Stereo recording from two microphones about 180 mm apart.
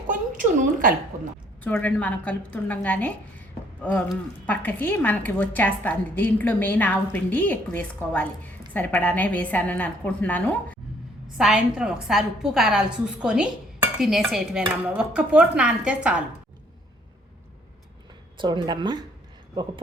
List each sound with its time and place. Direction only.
0.1 s a sound: 50° right (ahead or behind)
1.6 s a woman's voice: 10° left (ahead or behind)
11.3 s a woman's voice: 5° right (ahead or behind)
18.3 s speech: 25° right (ahead or behind)